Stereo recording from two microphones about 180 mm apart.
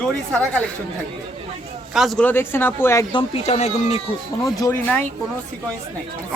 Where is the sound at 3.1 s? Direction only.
35° left (ahead or behind).